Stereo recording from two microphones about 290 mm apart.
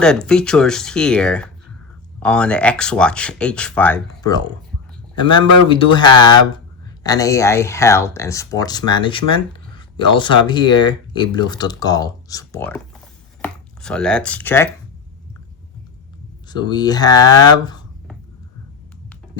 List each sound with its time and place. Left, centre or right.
0.0 s speech: centre
5.6 s speech: centre
16.5 s speech: centre